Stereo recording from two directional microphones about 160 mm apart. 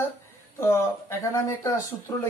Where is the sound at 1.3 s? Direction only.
20° left (ahead or behind).